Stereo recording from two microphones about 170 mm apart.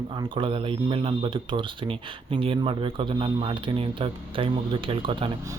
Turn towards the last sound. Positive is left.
turn(degrees=-30)  # may be behind; listen again after turning